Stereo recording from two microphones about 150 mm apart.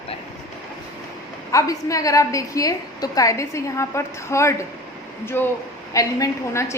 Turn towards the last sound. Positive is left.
turn(degrees=20)  # may be behind; listen again after turning